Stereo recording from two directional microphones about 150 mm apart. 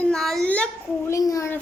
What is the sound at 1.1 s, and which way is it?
Speech, 20° left (ahead or behind).